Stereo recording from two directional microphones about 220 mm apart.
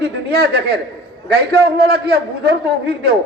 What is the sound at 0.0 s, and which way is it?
A man's voice, 45° right (ahead or behind).